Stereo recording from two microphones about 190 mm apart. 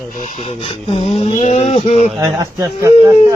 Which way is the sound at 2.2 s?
20° right (ahead or behind).